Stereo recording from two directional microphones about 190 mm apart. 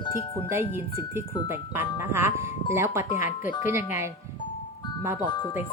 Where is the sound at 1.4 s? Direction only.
10° right (ahead or behind).